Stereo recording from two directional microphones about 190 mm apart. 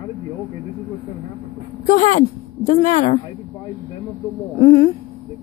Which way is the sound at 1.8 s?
45° left (ahead or behind).